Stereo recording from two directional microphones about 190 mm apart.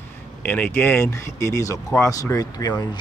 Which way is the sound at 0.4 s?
10° left (ahead or behind).